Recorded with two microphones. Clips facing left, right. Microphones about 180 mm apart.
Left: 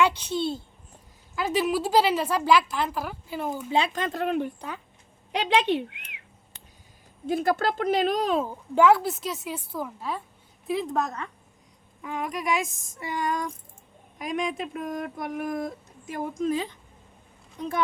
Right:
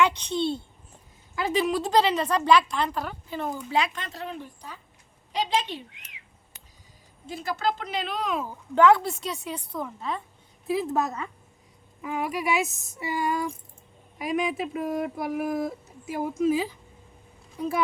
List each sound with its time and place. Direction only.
0.0 s a woman's voice: 5° left (ahead or behind)
3.7 s speech: 30° left (ahead or behind)
3.9 s speech: 50° left (ahead or behind)
7.3 s a woman's voice: 55° left (ahead or behind); by 8.4 s 35° left (ahead or behind)
8.7 s speech: 5° left (ahead or behind)